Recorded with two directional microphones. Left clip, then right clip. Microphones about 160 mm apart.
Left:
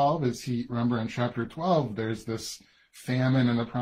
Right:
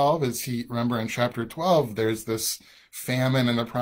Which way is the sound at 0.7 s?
10° right (ahead or behind).